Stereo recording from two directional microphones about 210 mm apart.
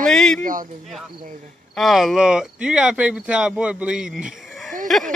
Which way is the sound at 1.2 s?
35° right (ahead or behind).